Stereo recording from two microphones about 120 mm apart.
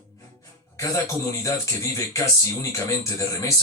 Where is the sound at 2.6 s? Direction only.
25° left (ahead or behind).